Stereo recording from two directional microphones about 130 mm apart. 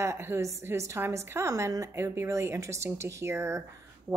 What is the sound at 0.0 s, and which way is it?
A woman's voice, 20° right (ahead or behind).